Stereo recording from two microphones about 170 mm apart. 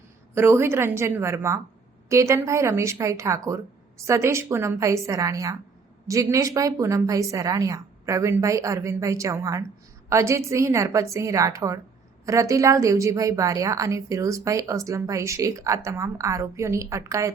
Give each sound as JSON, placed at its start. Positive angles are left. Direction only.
{"t": 0.3, "sound": "a woman's voice", "side_deg": -15}